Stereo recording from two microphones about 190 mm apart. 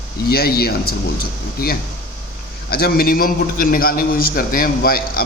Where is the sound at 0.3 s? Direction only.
55° left (ahead or behind).